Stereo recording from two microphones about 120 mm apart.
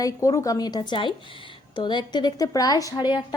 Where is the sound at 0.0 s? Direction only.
25° left (ahead or behind).